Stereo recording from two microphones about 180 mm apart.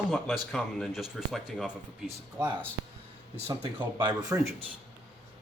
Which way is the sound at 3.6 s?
25° right (ahead or behind).